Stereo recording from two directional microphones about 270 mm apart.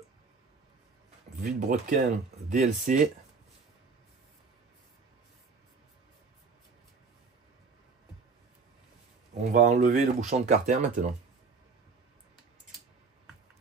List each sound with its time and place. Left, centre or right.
1.4 s speech: right
9.5 s speech: right